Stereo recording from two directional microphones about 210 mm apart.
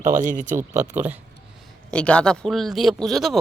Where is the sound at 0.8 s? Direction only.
10° right (ahead or behind).